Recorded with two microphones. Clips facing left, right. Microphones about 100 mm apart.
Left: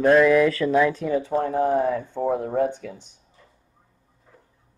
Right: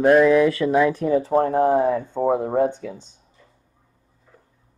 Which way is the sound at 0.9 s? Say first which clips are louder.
Right 4 dB; 45° right (ahead or behind).